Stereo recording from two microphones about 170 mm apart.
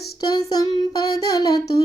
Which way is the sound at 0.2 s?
25° left (ahead or behind).